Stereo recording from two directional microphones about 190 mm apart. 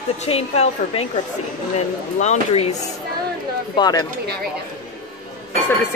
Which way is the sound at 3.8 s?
20° left (ahead or behind).